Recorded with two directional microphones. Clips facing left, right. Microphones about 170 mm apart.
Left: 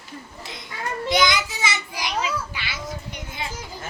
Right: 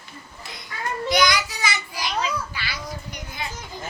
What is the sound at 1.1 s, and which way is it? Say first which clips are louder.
Child singing: even; 25° left (ahead or behind).